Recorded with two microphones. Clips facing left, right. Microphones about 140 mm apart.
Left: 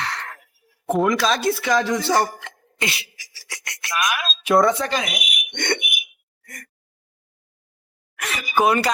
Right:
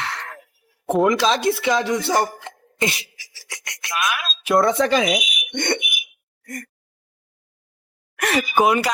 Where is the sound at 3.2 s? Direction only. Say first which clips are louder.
Even; 25° right (ahead or behind).